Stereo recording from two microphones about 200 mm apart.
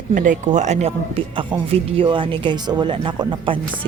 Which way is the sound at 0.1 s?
40° right (ahead or behind).